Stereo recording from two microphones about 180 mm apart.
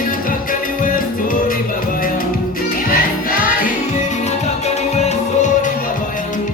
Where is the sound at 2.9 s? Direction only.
50° left (ahead or behind).